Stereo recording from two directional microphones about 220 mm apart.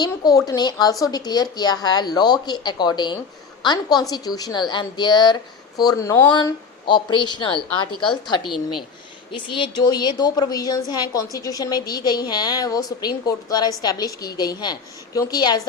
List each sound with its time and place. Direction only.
0.0 s a woman's voice: 15° left (ahead or behind)
9.3 s a woman's voice: 20° left (ahead or behind)